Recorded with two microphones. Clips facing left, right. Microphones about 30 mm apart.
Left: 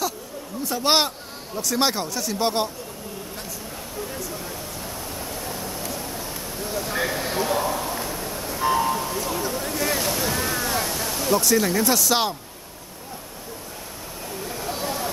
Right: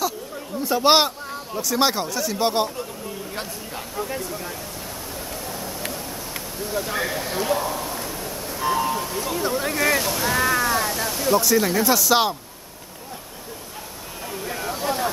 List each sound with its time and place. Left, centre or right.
0.7 s speech: centre
5.2 s a sound: centre
6.7 s speech: centre
7.0 s speech: centre
7.5 s a sound: centre
9.5 s speech: right
10.0 s speech: centre
10.3 s speech: centre